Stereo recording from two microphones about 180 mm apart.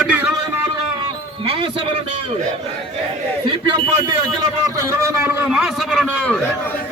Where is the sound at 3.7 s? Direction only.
20° right (ahead or behind); by 6.4 s 5° left (ahead or behind).